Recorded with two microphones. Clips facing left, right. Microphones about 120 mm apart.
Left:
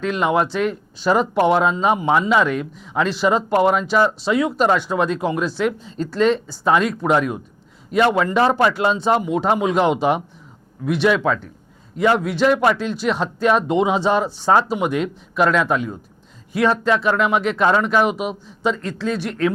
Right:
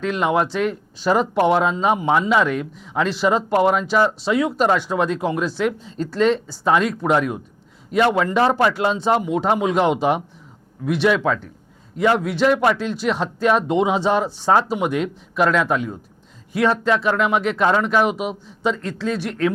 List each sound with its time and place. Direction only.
0.0 s speech: 20° left (ahead or behind)